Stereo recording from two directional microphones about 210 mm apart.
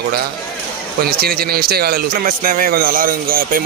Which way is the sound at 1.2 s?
45° right (ahead or behind).